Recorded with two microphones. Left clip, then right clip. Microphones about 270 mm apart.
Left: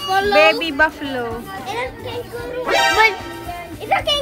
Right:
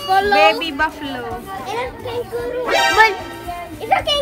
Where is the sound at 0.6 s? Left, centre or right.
Centre.